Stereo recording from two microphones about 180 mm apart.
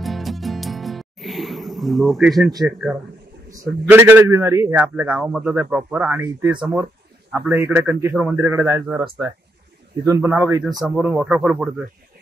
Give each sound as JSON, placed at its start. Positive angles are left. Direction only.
{"t": 0.0, "sound": "music", "side_deg": 0}
{"t": 2.6, "sound": "a man's voice", "side_deg": -5}
{"t": 7.3, "sound": "a man's voice", "side_deg": -5}
{"t": 10.0, "sound": "a man's voice", "side_deg": -15}
{"t": 10.8, "sound": "speech", "side_deg": -10}